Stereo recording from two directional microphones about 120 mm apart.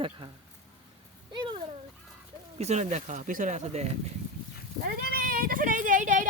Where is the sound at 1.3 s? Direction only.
40° right (ahead or behind).